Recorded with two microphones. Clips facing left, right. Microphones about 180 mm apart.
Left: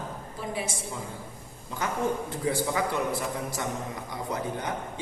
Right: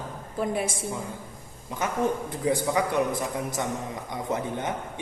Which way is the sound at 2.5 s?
20° right (ahead or behind).